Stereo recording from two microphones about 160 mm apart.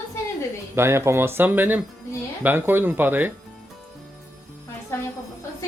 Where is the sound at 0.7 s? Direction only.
15° right (ahead or behind).